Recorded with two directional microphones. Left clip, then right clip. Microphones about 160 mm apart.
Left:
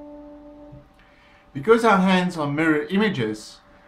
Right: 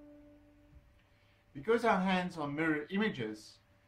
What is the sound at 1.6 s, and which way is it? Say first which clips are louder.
Speech: left 13 dB; centre (ahead or behind).